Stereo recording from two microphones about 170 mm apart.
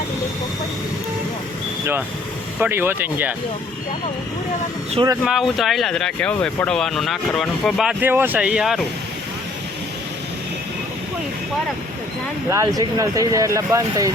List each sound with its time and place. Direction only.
2.6 s speech: 15° right (ahead or behind)
5.2 s speech: centre (ahead or behind)
12.5 s speech: 20° right (ahead or behind)